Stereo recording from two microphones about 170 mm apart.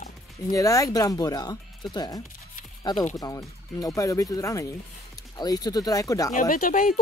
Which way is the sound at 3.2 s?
20° left (ahead or behind).